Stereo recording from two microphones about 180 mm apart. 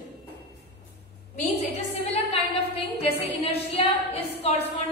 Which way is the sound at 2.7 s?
35° left (ahead or behind).